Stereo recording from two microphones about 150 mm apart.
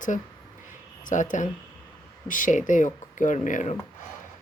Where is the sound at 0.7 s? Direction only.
60° left (ahead or behind).